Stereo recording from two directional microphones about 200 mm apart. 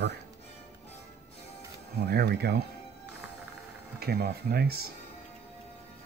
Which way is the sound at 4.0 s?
50° right (ahead or behind).